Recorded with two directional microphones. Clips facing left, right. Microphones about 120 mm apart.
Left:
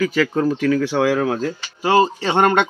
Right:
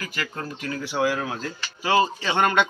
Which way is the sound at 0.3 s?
90° left.